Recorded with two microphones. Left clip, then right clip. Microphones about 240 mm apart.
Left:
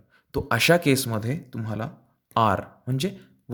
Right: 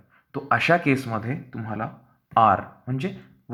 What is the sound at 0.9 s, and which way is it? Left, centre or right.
Speech, left.